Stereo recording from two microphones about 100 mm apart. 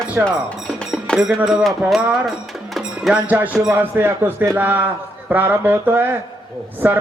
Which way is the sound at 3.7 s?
20° right (ahead or behind).